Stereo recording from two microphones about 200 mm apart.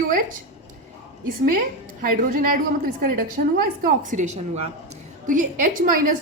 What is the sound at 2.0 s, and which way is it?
A woman's voice, 45° right (ahead or behind).